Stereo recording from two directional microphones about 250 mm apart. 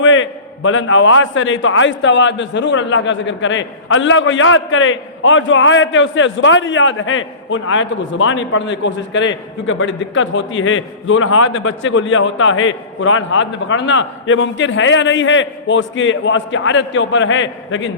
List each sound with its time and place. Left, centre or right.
0.0 s a man's voice: left